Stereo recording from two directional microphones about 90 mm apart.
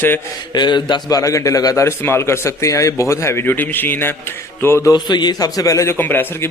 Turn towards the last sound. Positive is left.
turn(degrees=25)  # may be behind; listen again after turning